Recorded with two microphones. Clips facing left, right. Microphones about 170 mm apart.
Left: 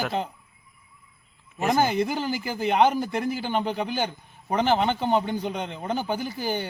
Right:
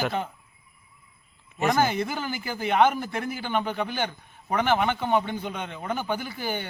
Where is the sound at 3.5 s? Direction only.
35° left (ahead or behind).